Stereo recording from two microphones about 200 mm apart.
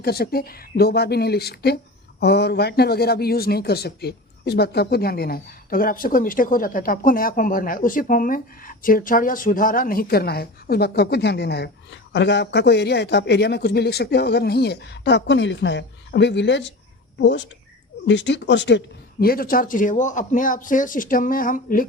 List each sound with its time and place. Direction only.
0.0 s speech: 50° left (ahead or behind)
19.2 s speech: 45° left (ahead or behind)